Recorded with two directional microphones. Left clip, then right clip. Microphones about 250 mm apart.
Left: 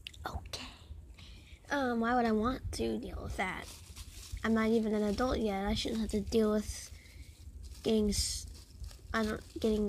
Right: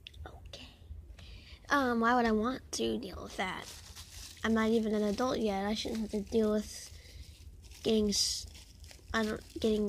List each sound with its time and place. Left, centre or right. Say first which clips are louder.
0.0 s whispering: left 8 dB; centre
1.7 s a woman's voice: right 4 dB; centre
2.3 s speech: even; centre
5.9 s speech: left 1 dB; centre